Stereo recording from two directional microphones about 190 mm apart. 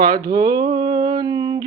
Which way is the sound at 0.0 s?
20° right (ahead or behind).